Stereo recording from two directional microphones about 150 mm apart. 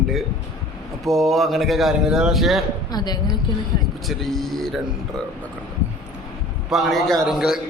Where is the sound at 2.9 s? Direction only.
25° left (ahead or behind).